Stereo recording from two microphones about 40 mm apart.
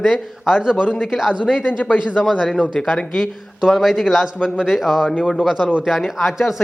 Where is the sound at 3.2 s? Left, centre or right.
Centre.